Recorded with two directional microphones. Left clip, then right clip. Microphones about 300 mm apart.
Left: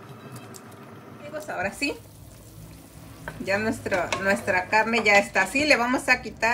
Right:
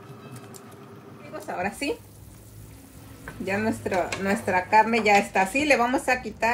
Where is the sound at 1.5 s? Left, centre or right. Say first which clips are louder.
Even; centre.